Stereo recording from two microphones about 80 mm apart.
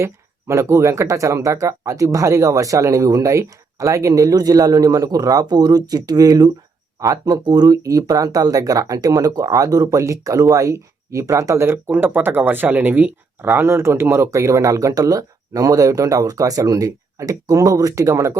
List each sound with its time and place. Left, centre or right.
0.0 s speech: right
7.8 s speech: right
11.9 s speech: right